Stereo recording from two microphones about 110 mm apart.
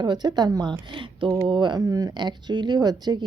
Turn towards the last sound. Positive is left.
turn(degrees=-35)  # may be behind; listen again after turning